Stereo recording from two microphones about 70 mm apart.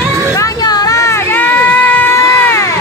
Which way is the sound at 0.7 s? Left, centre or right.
Left.